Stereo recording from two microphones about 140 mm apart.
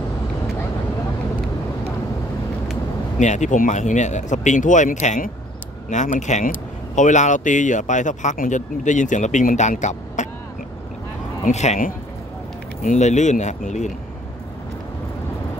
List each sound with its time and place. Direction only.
3.2 s speech: 60° left (ahead or behind)
11.4 s speech: 55° left (ahead or behind)
12.8 s speech: 60° left (ahead or behind)